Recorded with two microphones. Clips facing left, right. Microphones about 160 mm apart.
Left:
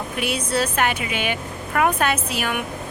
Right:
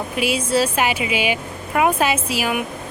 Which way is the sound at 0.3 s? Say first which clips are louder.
Right 2 dB; 10° right (ahead or behind).